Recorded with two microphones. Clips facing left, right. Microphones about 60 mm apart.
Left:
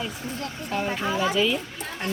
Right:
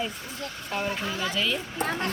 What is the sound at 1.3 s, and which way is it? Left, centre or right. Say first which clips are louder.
Speech: left 3 dB; centre.